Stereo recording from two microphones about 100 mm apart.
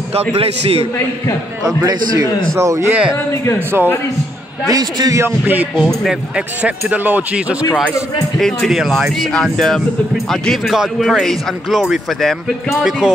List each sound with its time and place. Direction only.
0.4 s a man's voice: 80° right
1.8 s a man's voice: 40° right (ahead or behind)
2.9 s speech: 10° right (ahead or behind)
3.5 s a man's voice: 20° right (ahead or behind)
4.6 s a man's voice: 40° right (ahead or behind)
5.2 s speech: 15° right (ahead or behind)
5.9 s speech: 5° right (ahead or behind)
6.9 s speech: 15° right (ahead or behind)
8.4 s speech: 5° left (ahead or behind)